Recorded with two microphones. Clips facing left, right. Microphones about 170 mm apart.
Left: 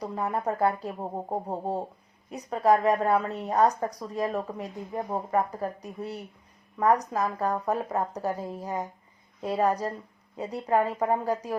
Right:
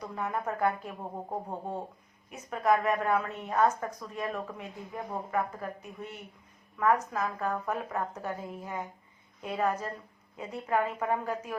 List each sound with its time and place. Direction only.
0.0 s a woman's voice: 35° left (ahead or behind)